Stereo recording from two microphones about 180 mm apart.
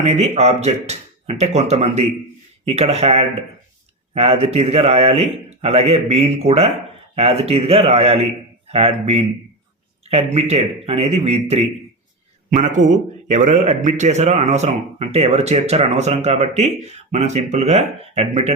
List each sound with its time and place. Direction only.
0.0 s speech: 35° right (ahead or behind)